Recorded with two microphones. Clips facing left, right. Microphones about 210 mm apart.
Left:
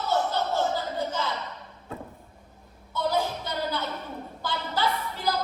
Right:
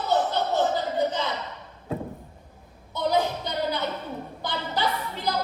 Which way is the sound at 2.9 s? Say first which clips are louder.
Right 3 dB; 20° right (ahead or behind).